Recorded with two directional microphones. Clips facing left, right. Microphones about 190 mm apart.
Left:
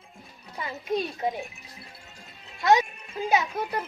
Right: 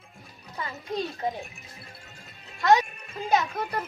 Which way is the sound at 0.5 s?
15° left (ahead or behind).